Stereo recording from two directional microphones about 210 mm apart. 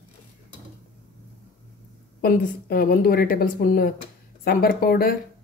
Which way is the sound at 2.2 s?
45° left (ahead or behind).